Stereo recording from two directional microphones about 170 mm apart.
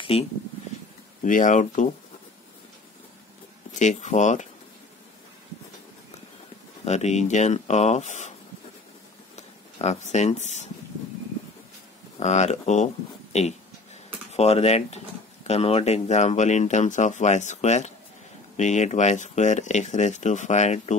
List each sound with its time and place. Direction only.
0.1 s speech: 35° left (ahead or behind)
1.2 s speech: 50° left (ahead or behind)
3.7 s speech: 45° left (ahead or behind)
6.8 s speech: 40° left (ahead or behind)
9.3 s speech: 40° left (ahead or behind)
12.2 s speech: 45° left (ahead or behind)